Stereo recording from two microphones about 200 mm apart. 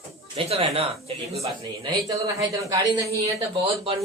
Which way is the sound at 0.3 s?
30° right (ahead or behind).